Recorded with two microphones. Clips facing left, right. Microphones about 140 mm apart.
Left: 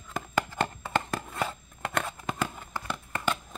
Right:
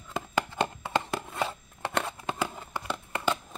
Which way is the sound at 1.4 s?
20° right (ahead or behind).